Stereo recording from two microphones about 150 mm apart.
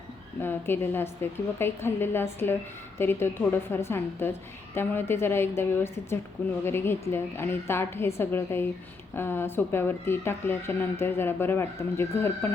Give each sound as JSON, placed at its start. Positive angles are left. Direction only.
{"t": 0.4, "sound": "speech", "side_deg": 15}